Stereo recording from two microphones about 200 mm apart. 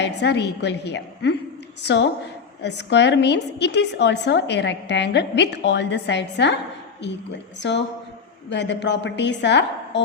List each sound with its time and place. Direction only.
0.0 s a woman's voice: 60° left (ahead or behind)